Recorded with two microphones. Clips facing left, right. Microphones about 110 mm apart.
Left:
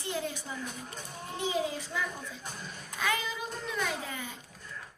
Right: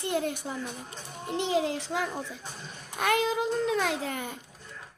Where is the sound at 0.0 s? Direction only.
60° right (ahead or behind).